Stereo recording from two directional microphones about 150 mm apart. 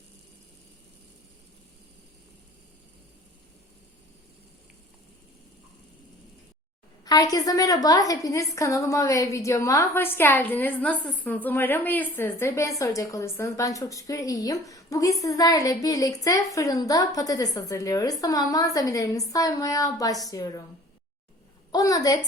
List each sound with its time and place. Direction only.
7.0 s a woman's voice: 25° left (ahead or behind)
21.7 s a woman's voice: 25° left (ahead or behind)